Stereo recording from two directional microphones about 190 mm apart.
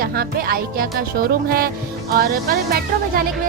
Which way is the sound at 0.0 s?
50° right (ahead or behind).